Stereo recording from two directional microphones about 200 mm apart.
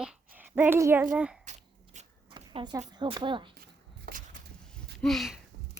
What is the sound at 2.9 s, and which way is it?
Speech, 20° right (ahead or behind).